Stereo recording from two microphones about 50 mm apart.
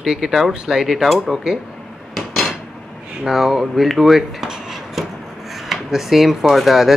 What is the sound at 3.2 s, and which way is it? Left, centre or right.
Speech, centre.